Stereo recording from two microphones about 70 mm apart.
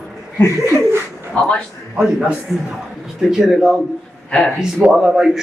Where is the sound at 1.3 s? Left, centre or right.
Centre.